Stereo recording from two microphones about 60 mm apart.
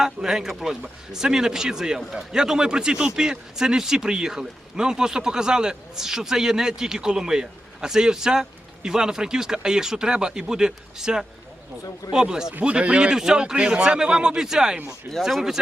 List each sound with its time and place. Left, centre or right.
0.0 s speech: centre